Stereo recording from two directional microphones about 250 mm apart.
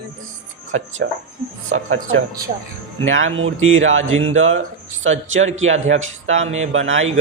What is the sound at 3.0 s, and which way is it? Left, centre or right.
Speech, right.